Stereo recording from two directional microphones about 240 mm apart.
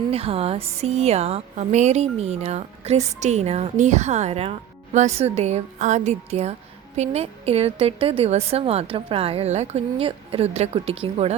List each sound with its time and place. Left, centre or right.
0.1 s speech: right